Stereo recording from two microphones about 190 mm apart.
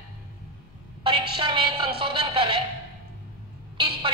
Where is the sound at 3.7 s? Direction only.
25° right (ahead or behind).